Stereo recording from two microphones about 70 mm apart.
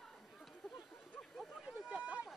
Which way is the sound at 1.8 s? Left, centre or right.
Centre.